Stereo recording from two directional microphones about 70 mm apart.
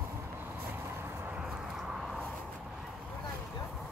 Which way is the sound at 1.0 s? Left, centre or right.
Right.